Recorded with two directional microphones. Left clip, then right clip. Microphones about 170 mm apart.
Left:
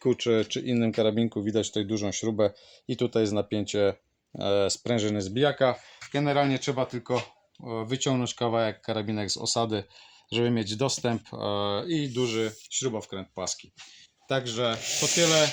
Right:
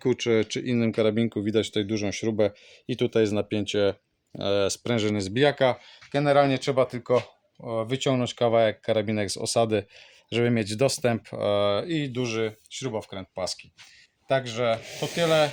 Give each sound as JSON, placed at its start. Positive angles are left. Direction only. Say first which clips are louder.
{"t": 0.0, "sound": "speech", "louder": "right 1 dB", "side_deg": -35}